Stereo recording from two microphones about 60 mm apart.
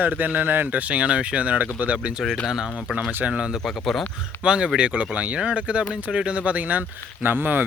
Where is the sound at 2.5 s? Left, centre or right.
Centre.